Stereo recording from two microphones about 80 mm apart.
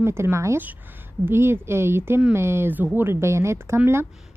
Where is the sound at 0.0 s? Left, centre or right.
Right.